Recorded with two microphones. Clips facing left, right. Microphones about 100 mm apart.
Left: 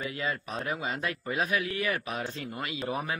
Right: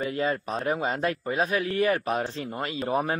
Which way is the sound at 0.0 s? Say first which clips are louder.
Right 6 dB; 40° right (ahead or behind).